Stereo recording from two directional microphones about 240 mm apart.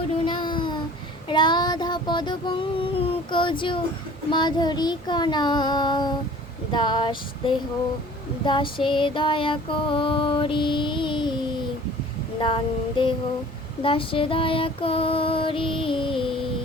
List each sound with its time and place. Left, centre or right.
0.3 s child singing: centre
6.7 s female singing: centre